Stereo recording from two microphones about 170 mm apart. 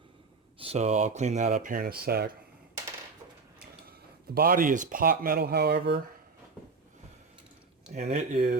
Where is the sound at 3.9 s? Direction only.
65° right (ahead or behind); by 6.0 s 80° right.